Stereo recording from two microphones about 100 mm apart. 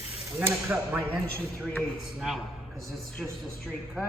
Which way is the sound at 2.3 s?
Centre (ahead or behind).